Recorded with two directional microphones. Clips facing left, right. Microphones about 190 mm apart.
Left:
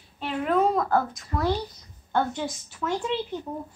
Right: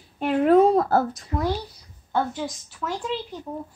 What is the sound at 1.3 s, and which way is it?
Speech, 10° right (ahead or behind).